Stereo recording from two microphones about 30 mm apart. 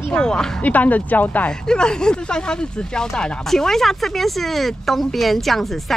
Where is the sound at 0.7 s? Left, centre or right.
Left.